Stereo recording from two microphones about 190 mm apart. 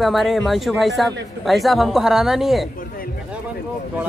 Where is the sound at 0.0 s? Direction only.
Centre (ahead or behind).